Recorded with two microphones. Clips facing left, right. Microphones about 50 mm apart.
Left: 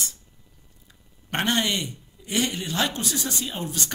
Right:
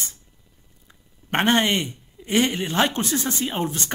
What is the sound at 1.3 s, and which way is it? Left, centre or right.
A man's voice, right.